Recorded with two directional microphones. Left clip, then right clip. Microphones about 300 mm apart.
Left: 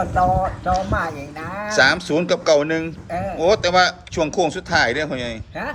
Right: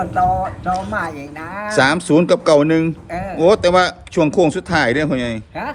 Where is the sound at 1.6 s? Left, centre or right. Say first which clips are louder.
Right 1 dB; right.